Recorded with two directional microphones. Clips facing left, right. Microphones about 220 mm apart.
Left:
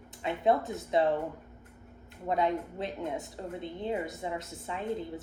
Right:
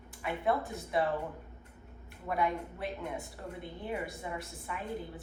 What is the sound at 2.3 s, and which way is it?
A woman's voice, 20° left (ahead or behind).